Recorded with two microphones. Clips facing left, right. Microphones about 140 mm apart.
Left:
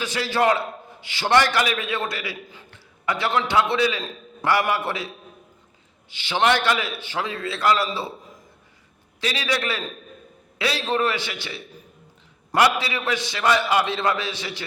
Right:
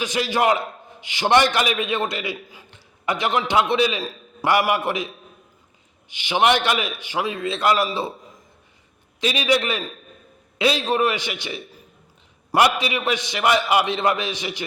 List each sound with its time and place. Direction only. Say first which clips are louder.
0.0 s a man's voice: right 1 dB; 15° right (ahead or behind)
6.1 s a man's voice: right 2 dB; 15° right (ahead or behind)
9.2 s a man's voice: right 5 dB; 20° right (ahead or behind)